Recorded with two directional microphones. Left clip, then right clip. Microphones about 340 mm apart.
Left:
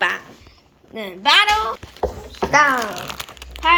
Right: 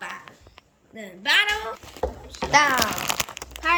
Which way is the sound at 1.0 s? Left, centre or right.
Centre.